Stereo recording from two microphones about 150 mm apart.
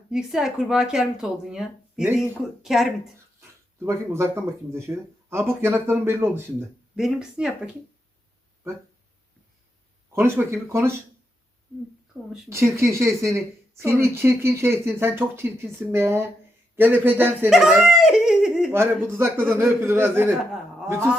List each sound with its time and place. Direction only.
0.1 s speech: 5° right (ahead or behind)
3.8 s a woman's voice: 15° right (ahead or behind)
6.9 s speech: 5° right (ahead or behind)
10.1 s a woman's voice: 15° right (ahead or behind)
12.5 s a woman's voice: 20° right (ahead or behind)
17.5 s speech: centre (ahead or behind)
18.7 s a woman's voice: 15° right (ahead or behind)
20.5 s a sound: 5° right (ahead or behind)